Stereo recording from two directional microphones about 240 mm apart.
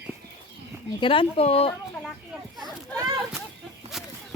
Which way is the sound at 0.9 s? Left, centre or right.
Centre.